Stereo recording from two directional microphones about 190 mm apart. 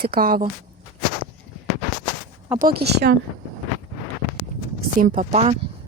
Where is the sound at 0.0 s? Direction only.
50° right (ahead or behind).